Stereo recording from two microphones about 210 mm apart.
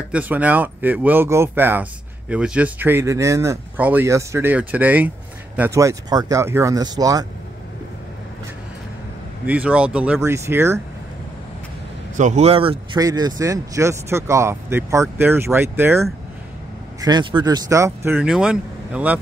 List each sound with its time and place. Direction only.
0.1 s speech: 5° right (ahead or behind)
9.5 s speech: 5° right (ahead or behind)
12.2 s speech: 35° right (ahead or behind); by 16.1 s 10° right (ahead or behind)
17.0 s speech: 20° right (ahead or behind); by 19.1 s 5° right (ahead or behind)